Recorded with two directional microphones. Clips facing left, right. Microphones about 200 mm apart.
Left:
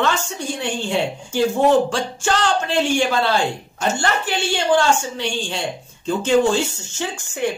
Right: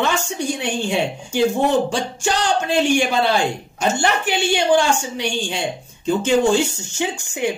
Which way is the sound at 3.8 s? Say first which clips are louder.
Right 2 dB; 15° right (ahead or behind).